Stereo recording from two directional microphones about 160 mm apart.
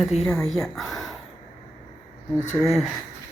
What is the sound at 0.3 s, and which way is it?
Speech, centre (ahead or behind).